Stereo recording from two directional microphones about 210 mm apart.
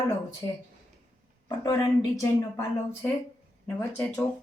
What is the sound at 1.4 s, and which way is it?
Speech, 20° left (ahead or behind).